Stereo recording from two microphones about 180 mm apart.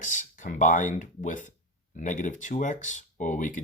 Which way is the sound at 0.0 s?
45° left (ahead or behind).